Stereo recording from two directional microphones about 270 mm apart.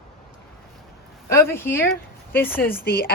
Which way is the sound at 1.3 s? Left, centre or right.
Centre.